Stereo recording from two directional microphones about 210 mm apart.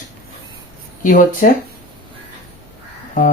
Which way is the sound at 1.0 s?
40° left (ahead or behind).